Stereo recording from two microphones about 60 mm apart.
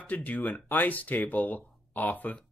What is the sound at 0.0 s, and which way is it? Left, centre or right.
Speech, left.